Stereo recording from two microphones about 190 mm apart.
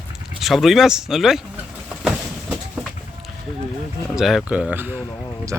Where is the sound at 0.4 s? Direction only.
Centre (ahead or behind).